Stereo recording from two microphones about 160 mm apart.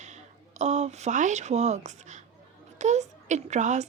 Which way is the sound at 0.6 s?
45° right (ahead or behind).